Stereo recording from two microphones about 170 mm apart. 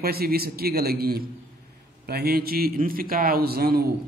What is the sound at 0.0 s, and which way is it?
A man's voice, 65° right (ahead or behind).